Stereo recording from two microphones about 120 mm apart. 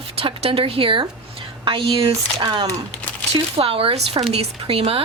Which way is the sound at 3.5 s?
50° right (ahead or behind).